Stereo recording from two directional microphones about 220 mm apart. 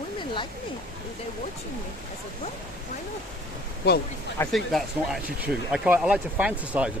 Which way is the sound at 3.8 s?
45° left (ahead or behind).